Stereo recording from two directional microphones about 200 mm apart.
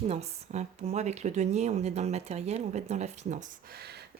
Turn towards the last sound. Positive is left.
turn(degrees=-40)  # may be behind; listen again after turning